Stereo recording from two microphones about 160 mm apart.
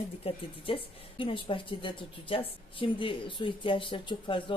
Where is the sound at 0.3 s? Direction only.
35° left (ahead or behind).